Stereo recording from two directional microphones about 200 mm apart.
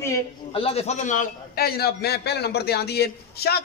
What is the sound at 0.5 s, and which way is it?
A man's voice, 30° left (ahead or behind).